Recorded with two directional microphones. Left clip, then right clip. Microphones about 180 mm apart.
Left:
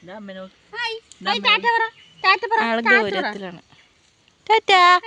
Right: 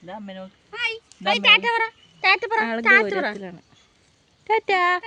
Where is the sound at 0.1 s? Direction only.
40° right (ahead or behind).